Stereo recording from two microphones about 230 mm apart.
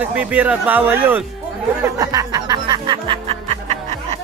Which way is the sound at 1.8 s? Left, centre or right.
Centre.